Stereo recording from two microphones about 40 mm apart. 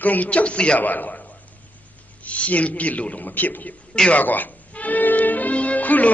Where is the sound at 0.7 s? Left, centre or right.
Left.